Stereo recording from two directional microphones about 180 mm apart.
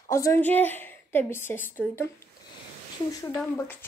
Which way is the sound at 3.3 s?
10° left (ahead or behind).